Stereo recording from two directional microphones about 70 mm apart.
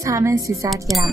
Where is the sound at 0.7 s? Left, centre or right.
Centre.